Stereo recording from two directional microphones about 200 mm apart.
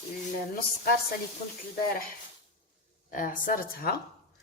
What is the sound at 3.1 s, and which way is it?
Speech, 40° left (ahead or behind).